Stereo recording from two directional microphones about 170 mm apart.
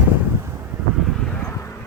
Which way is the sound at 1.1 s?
Centre (ahead or behind).